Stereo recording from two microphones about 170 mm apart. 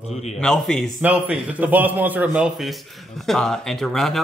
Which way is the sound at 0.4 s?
5° left (ahead or behind).